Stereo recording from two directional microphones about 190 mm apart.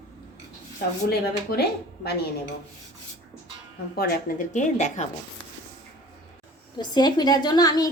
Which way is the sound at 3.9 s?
40° left (ahead or behind).